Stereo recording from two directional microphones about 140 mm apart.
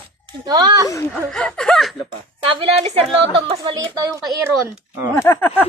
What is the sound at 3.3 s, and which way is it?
Speech, 35° right (ahead or behind).